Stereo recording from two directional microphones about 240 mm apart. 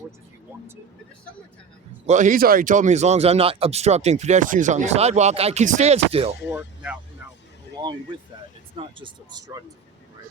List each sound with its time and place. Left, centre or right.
2.0 s speech: right
6.5 s speech: centre
9.0 s speech: centre